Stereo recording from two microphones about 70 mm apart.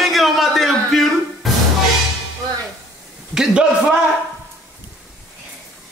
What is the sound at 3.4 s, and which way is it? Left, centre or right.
Speech, centre.